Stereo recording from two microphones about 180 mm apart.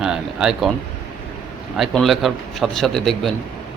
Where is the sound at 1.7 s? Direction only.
Centre (ahead or behind).